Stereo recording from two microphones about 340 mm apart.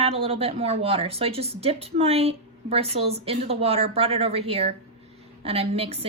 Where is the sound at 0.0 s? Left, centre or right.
Centre.